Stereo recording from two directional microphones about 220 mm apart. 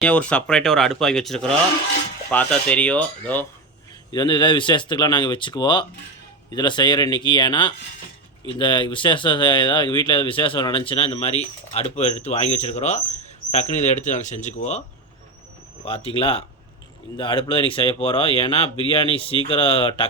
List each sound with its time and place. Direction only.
0.0 s speech: 5° left (ahead or behind)
4.1 s speech: 20° left (ahead or behind)
15.8 s speech: 25° left (ahead or behind)